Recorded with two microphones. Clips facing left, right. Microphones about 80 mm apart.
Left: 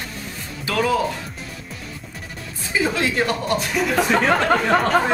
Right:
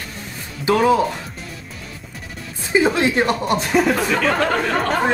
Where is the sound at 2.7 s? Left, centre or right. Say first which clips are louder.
Right 5 dB; right.